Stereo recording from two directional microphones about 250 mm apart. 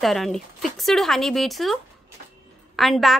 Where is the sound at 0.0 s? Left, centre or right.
Centre.